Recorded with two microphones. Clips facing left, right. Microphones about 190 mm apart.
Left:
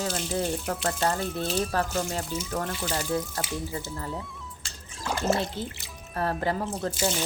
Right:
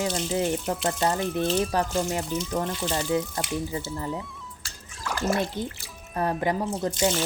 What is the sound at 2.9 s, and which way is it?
Speech, 15° right (ahead or behind).